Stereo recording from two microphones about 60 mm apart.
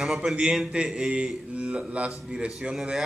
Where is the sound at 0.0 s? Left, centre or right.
Centre.